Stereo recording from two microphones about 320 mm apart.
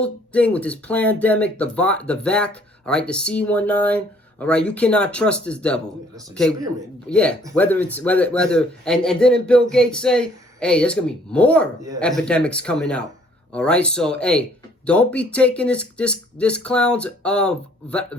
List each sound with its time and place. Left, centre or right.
0.0 s a man's voice: centre
7.1 s a man's voice: centre